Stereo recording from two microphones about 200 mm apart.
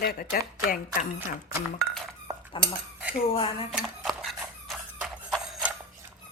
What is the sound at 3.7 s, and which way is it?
Horse, centre (ahead or behind).